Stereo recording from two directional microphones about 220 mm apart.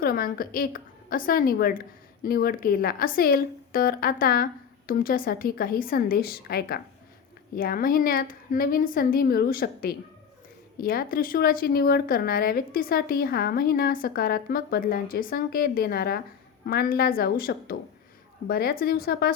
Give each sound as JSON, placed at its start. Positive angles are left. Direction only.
{"t": 0.0, "sound": "a woman's voice", "side_deg": 40}